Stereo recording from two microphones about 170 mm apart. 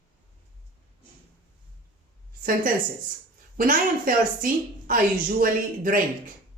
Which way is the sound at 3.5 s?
55° right (ahead or behind).